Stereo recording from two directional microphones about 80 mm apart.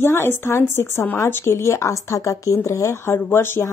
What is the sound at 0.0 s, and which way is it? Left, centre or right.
Speech, left.